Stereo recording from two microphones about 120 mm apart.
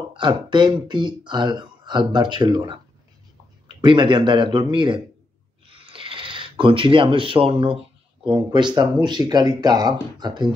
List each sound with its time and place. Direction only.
0.1 s speech: 40° right (ahead or behind)
5.7 s a sound: 45° right (ahead or behind)
8.3 s speech: 40° right (ahead or behind)